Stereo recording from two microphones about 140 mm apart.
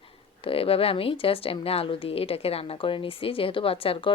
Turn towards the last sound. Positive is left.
turn(degrees=40)  # may be behind; listen again after turning